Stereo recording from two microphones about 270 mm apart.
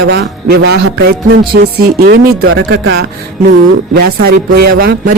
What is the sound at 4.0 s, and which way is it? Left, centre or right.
Speech, right.